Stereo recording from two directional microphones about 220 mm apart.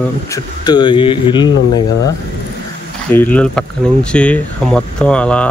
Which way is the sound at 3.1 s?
5° left (ahead or behind).